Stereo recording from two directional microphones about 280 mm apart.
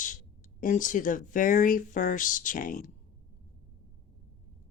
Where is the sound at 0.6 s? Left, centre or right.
Left.